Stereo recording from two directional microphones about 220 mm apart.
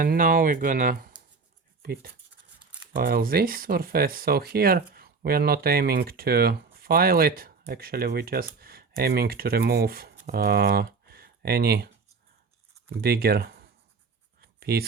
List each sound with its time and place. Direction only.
0.0 s speech: 40° right (ahead or behind)
13.0 s speech: 45° right (ahead or behind)
14.4 s writing: 45° right (ahead or behind)